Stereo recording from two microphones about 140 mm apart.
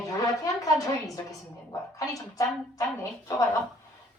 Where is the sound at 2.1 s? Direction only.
25° left (ahead or behind).